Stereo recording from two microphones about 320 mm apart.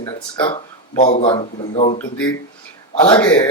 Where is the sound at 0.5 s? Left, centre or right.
Left.